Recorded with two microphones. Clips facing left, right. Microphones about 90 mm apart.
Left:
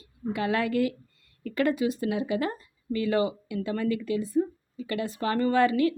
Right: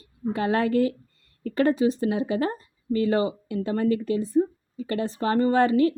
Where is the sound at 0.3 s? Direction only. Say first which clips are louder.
Right 4 dB; 35° right (ahead or behind).